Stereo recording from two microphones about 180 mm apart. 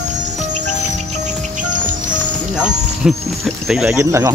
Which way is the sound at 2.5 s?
5° right (ahead or behind).